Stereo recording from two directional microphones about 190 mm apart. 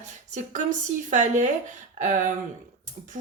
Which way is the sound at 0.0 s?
40° right (ahead or behind).